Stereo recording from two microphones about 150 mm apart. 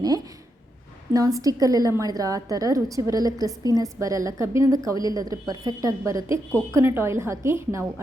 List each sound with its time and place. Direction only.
1.1 s a woman's voice: 25° right (ahead or behind)